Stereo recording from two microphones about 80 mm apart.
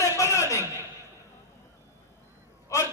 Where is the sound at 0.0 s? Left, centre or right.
Left.